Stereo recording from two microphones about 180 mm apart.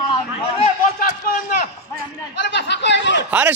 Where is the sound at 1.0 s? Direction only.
50° left (ahead or behind).